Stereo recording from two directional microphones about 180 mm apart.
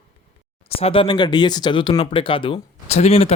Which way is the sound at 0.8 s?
30° left (ahead or behind).